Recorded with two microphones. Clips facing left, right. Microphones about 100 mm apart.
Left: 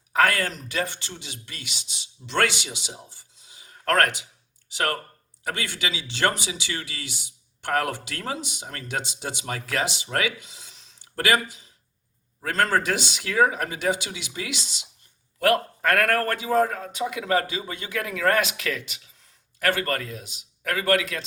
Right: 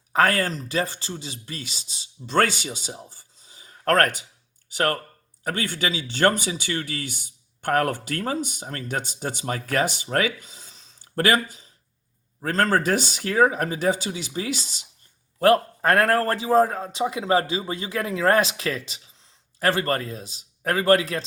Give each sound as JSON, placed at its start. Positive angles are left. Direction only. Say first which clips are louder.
{"t": 0.1, "sound": "a man's voice", "louder": "right 1 dB", "side_deg": -35}